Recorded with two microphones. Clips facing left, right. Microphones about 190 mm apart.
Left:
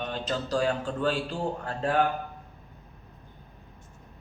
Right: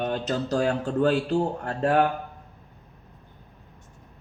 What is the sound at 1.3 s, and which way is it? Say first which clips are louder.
Speech: right 6 dB; 65° right (ahead or behind).